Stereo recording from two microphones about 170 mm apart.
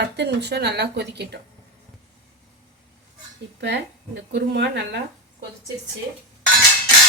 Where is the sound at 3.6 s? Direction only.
85° right.